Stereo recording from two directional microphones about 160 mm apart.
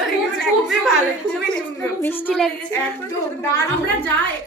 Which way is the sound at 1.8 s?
15° left (ahead or behind).